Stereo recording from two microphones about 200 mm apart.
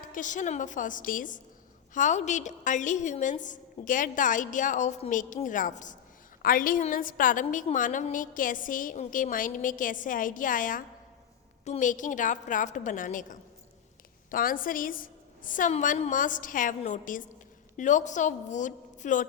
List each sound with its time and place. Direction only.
0.1 s a woman's voice: 40° left (ahead or behind)